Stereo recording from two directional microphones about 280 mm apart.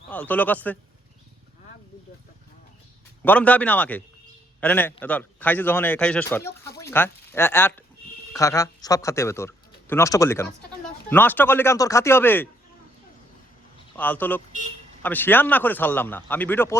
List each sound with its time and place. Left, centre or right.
0.1 s a man's voice: centre
3.2 s a man's voice: centre
13.9 s a man's voice: centre